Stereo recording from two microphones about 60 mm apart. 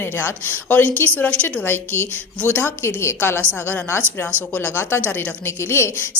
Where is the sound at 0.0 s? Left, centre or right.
Left.